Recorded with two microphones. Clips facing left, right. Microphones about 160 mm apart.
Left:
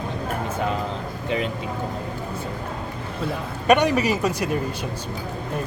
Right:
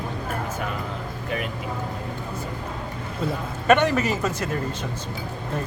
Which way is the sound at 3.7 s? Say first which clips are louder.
Left 1 dB; 15° left (ahead or behind).